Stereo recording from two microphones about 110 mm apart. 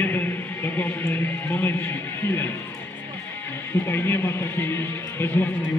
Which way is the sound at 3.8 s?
20° left (ahead or behind).